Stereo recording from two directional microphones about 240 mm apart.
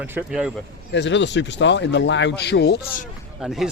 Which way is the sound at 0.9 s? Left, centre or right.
Left.